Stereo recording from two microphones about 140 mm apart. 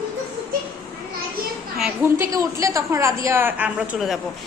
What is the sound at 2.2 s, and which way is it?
A woman's voice, 25° right (ahead or behind).